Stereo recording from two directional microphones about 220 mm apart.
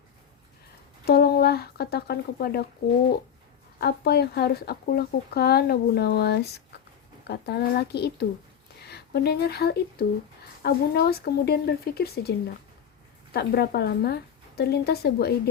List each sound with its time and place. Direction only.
1.0 s a sound: 45° left (ahead or behind)
3.8 s speech: 45° left (ahead or behind)
13.3 s speech: 45° left (ahead or behind)